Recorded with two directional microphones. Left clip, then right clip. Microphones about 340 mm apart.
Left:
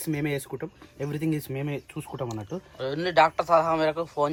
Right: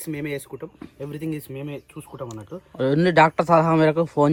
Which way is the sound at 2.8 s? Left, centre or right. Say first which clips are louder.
Right 5 dB; right.